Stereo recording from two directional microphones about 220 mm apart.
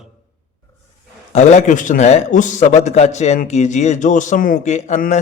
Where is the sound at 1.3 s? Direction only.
35° left (ahead or behind).